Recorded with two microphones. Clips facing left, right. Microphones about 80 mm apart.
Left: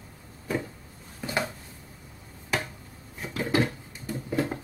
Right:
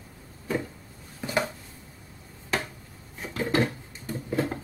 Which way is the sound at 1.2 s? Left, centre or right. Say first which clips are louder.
Right 2 dB; centre.